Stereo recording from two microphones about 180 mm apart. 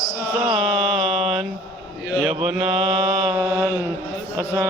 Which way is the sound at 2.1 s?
Centre (ahead or behind).